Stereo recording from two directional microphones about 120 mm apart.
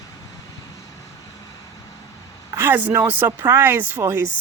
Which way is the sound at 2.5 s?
15° right (ahead or behind).